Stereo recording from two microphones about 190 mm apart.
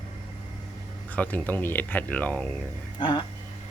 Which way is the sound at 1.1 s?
10° left (ahead or behind).